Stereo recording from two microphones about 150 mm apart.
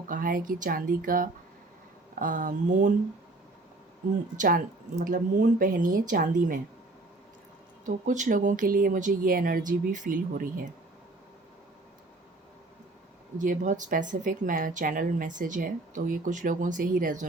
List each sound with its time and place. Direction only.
0.1 s speech: 70° right (ahead or behind)
4.4 s speech: 65° right (ahead or behind)
7.9 s speech: 55° right (ahead or behind)
13.4 s speech: 60° right (ahead or behind)